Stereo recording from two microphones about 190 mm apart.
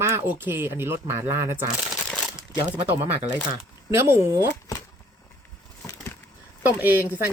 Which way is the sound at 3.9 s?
15° right (ahead or behind).